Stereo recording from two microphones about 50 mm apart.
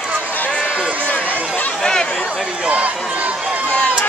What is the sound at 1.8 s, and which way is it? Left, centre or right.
Chatter, centre.